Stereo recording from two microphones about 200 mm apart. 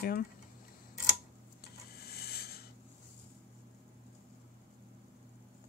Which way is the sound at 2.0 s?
50° left (ahead or behind).